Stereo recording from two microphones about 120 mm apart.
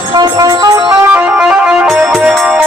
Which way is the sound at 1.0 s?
15° right (ahead or behind).